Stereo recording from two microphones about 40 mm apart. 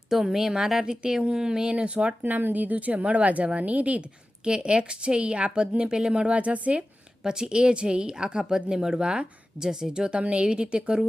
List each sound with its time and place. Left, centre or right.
0.1 s a woman's voice: centre
1.7 s a woman's voice: right
2.2 s speech: right
4.4 s a woman's voice: right
9.9 s a woman's voice: right